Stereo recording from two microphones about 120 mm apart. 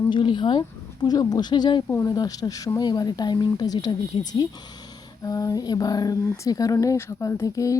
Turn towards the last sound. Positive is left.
turn(degrees=25)  # may be behind; listen again after turning